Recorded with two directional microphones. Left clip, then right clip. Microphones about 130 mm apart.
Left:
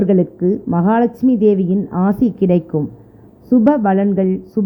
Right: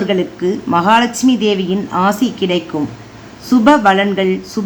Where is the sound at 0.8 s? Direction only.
35° left (ahead or behind).